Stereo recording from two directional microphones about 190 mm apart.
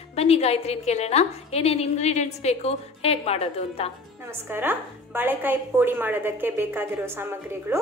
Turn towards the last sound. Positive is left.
turn(degrees=-10)  # may be behind; listen again after turning